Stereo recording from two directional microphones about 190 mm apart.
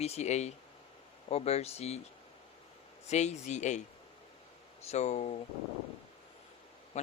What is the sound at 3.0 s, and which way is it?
Speech, 35° left (ahead or behind).